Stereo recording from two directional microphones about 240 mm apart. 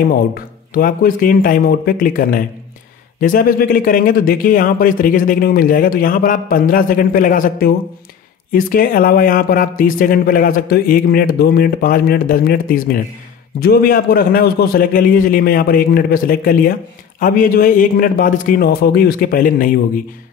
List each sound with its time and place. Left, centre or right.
0.1 s speech: left